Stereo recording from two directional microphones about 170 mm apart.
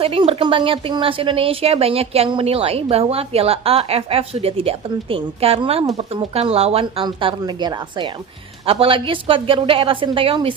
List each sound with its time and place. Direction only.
0.0 s speech: 35° right (ahead or behind)